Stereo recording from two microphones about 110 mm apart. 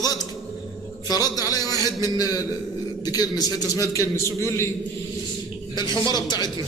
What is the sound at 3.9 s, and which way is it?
Speech, 25° left (ahead or behind).